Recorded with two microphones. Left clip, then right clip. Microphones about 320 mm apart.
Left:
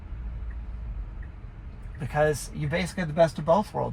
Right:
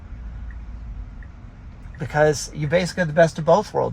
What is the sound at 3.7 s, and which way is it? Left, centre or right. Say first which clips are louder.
Speech: right 8 dB; right.